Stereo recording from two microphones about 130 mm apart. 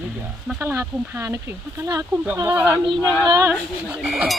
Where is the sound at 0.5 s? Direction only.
20° right (ahead or behind).